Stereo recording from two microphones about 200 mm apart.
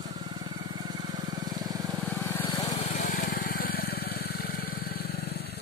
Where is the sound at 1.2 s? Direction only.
20° right (ahead or behind).